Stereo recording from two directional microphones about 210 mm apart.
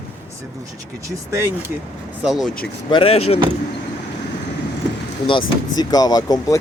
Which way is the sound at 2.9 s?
25° left (ahead or behind).